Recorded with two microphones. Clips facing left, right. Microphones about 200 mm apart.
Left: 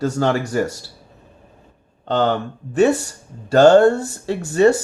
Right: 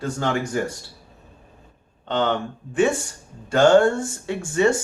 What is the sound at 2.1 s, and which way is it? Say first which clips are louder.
Speech: left 4 dB; 40° left (ahead or behind).